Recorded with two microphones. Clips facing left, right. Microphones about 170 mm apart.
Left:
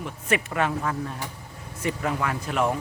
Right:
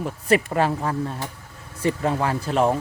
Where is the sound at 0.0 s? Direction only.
35° right (ahead or behind).